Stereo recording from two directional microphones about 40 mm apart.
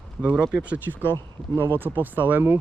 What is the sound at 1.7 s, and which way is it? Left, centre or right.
Speech, right.